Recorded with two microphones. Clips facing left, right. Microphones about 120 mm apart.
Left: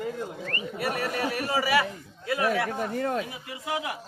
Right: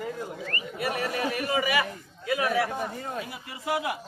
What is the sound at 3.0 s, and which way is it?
Speech, 80° left.